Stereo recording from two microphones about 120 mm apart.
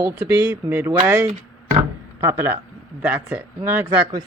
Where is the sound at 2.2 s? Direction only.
20° right (ahead or behind).